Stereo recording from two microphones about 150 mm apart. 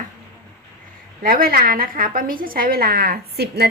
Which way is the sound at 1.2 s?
75° right (ahead or behind).